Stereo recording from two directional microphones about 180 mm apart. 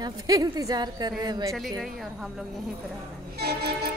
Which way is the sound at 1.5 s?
Centre (ahead or behind).